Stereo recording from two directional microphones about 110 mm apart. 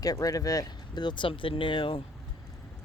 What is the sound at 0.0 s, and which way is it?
Speech, 35° left (ahead or behind).